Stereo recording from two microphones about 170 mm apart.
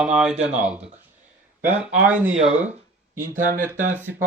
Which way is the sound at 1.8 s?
10° right (ahead or behind).